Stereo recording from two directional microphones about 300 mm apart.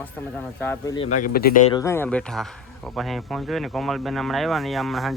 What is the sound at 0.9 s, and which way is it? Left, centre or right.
Speech, left.